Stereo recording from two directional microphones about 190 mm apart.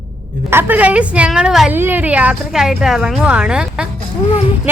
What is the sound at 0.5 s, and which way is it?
A woman's voice, 10° right (ahead or behind).